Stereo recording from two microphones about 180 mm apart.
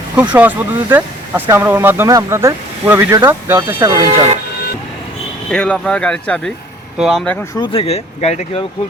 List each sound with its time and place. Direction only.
0.3 s speech: 10° right (ahead or behind)
5.5 s speech: 5° left (ahead or behind)
7.5 s speech: 30° left (ahead or behind)